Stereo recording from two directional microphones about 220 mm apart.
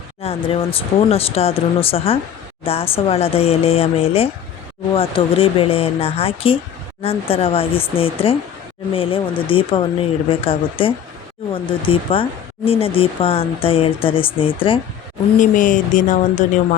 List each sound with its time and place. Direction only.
0.2 s speech: 25° left (ahead or behind)
15.4 s speech: 35° left (ahead or behind)